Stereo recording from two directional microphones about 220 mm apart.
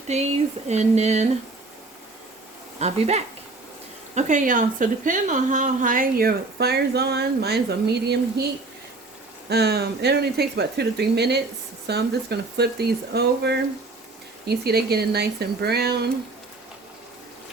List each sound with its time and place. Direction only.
0.7 s a woman's voice: 30° right (ahead or behind)
2.7 s a woman's voice: 30° right (ahead or behind); by 8.4 s 50° right (ahead or behind)
9.5 s speech: 45° right (ahead or behind)